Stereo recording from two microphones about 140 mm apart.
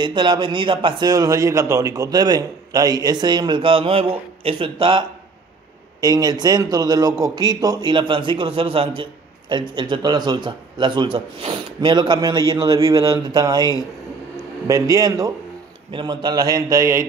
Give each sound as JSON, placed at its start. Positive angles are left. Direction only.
{"t": 0.0, "sound": "a man's voice", "side_deg": -30}
{"t": 5.9, "sound": "a man's voice", "side_deg": -25}